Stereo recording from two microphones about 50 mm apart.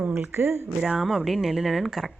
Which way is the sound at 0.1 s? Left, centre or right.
Right.